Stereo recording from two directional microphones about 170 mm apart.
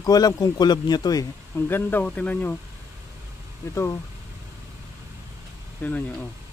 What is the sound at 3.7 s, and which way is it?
Speech, 15° left (ahead or behind).